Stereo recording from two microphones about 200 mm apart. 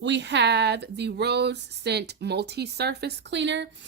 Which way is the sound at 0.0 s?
60° right (ahead or behind).